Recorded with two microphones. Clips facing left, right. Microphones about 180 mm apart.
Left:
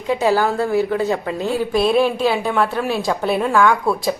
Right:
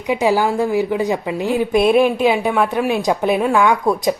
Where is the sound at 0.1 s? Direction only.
15° right (ahead or behind).